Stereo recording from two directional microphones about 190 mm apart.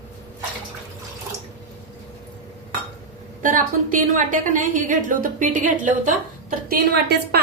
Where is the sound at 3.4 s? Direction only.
45° right (ahead or behind).